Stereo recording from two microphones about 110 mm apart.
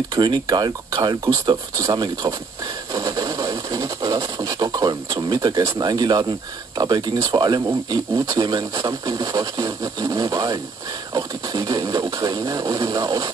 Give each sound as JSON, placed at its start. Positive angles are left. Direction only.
{"t": 0.1, "sound": "speech", "side_deg": -40}
{"t": 2.9, "sound": "a sound", "side_deg": -30}
{"t": 5.6, "sound": "speech", "side_deg": -35}